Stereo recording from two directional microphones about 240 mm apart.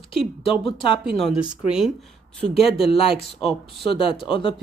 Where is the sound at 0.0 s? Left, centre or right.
Left.